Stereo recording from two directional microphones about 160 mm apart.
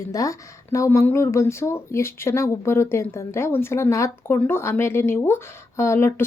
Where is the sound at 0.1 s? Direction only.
20° left (ahead or behind).